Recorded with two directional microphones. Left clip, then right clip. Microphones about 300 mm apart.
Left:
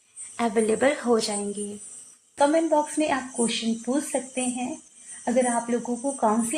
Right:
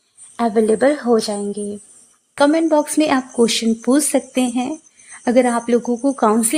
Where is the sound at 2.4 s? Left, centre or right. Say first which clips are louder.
Right 6 dB; right.